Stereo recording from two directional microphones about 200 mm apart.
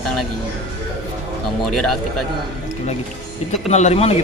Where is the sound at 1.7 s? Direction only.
Centre (ahead or behind).